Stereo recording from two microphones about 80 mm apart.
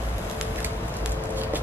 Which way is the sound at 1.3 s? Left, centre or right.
Right.